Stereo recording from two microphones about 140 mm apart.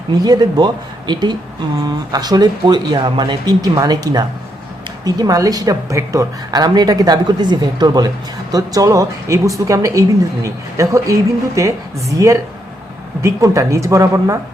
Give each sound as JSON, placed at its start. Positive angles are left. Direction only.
{"t": 0.1, "sound": "a woman's voice", "side_deg": -30}